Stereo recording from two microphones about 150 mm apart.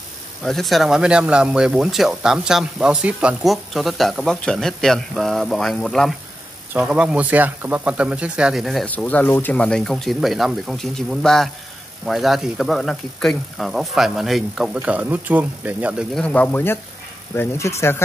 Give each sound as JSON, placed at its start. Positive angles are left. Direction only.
{"t": 0.4, "sound": "speech", "side_deg": 0}
{"t": 8.8, "sound": "speech", "side_deg": 10}
{"t": 16.2, "sound": "speech", "side_deg": 10}